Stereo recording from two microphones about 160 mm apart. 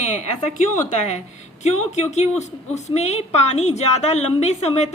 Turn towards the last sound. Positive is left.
turn(degrees=45)  # may be behind; listen again after turning